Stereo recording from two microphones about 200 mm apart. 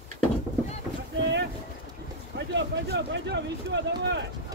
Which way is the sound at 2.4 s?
60° right (ahead or behind).